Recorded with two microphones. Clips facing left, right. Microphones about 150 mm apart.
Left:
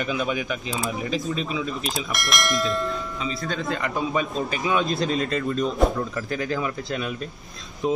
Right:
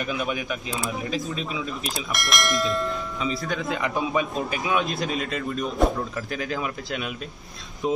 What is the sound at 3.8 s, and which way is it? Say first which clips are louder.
Speech: right 2 dB; 15° right (ahead or behind).